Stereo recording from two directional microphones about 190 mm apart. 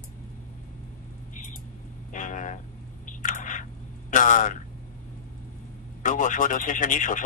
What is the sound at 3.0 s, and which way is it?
Squish, 45° left (ahead or behind).